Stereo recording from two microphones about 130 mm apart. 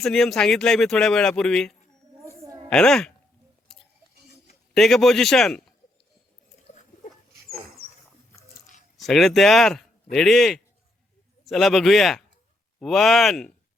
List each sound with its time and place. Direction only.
0.0 s speech: 5° left (ahead or behind)
2.2 s a sound: 20° right (ahead or behind)
2.6 s a woman's voice: 5° left (ahead or behind)
4.7 s speech: 5° left (ahead or behind)
9.0 s speech: centre (ahead or behind)